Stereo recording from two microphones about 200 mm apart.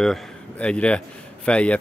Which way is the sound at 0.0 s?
5° left (ahead or behind).